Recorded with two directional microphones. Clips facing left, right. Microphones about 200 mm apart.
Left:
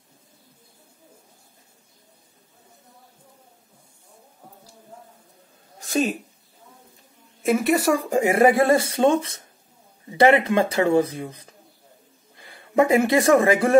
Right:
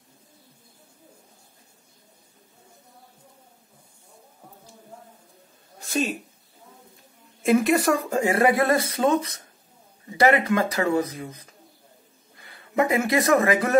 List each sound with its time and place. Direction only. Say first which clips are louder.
7.4 s speech: even; 5° left (ahead or behind); by 13.7 s 30° left (ahead or behind)